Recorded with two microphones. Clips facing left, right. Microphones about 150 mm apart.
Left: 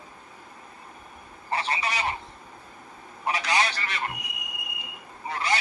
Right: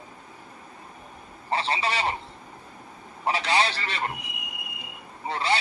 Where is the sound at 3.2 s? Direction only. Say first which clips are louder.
Right 2 dB; 30° right (ahead or behind).